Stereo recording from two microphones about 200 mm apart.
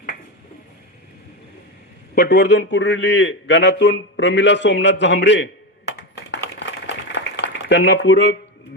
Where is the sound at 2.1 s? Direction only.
60° left (ahead or behind).